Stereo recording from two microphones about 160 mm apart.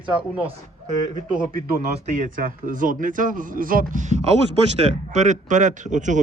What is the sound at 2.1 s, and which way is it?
A man's voice, 55° right (ahead or behind).